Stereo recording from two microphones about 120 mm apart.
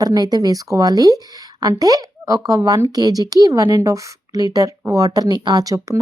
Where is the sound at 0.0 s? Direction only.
35° right (ahead or behind).